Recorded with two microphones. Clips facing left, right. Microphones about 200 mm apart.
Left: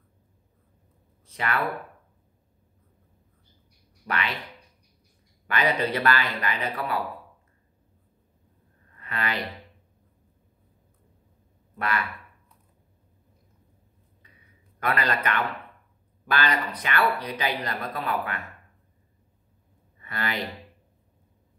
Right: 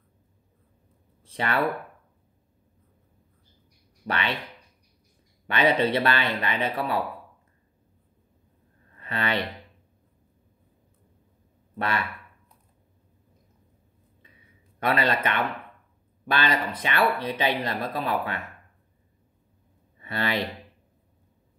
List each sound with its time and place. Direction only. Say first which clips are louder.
1.2 s speech: right 2 dB; 30° right (ahead or behind)
4.1 s speech: right 2 dB; 30° right (ahead or behind)
5.5 s speech: right 3 dB; 25° right (ahead or behind)
9.0 s speech: right 3 dB; 30° right (ahead or behind)
14.9 s speech: right 2 dB; 25° right (ahead or behind)
20.0 s speech: right 4 dB; 25° right (ahead or behind)